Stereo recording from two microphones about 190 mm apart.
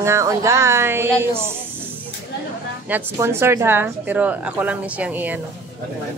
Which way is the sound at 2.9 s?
10° right (ahead or behind).